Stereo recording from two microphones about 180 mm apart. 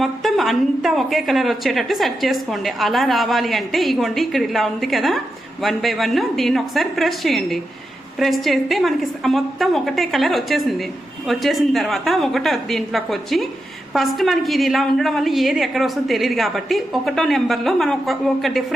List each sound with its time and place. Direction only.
0.0 s a woman's voice: centre (ahead or behind)